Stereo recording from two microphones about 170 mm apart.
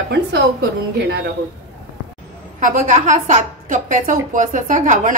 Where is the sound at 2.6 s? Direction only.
50° right (ahead or behind).